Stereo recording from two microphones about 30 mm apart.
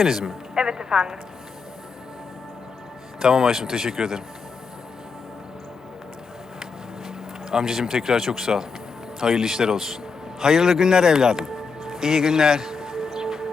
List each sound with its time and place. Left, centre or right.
0.0 s a man's voice: centre
0.5 s music: right
3.2 s a man's voice: centre
7.5 s a man's voice: centre
11.9 s music: centre